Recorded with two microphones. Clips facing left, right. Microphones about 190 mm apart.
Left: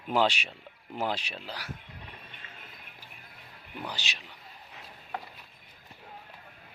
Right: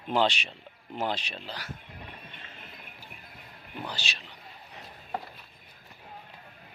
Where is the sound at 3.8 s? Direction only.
15° left (ahead or behind).